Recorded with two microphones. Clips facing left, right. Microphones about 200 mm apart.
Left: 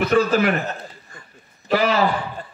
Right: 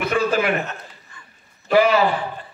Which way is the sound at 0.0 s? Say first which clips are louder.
Left 3 dB; 40° left (ahead or behind).